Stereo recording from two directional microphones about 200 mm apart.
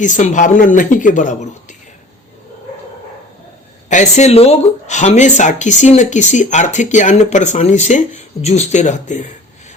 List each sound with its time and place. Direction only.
0.0 s speech: 40° left (ahead or behind)
3.8 s speech: 35° left (ahead or behind)